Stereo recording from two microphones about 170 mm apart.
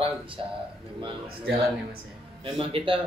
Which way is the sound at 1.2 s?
65° right (ahead or behind).